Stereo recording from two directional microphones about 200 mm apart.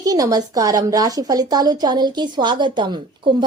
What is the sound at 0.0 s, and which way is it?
A woman's voice, 20° right (ahead or behind).